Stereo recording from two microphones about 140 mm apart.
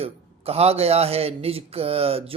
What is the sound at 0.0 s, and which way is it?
A man's voice, 45° right (ahead or behind).